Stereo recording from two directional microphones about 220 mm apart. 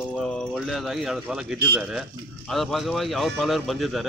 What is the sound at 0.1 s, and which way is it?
A man's voice, centre (ahead or behind).